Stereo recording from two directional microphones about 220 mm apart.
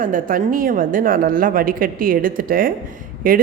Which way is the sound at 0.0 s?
40° right (ahead or behind).